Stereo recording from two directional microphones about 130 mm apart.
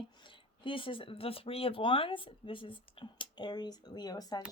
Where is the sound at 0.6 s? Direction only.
40° left (ahead or behind).